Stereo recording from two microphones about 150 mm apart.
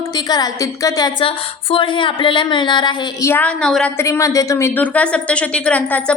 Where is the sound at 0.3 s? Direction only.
25° left (ahead or behind).